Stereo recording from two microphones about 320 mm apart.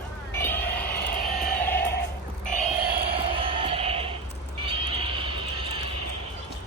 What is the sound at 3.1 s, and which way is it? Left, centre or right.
Music, centre.